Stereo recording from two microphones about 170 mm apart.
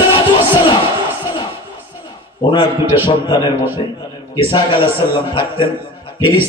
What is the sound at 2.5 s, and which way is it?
A man's voice, 25° left (ahead or behind).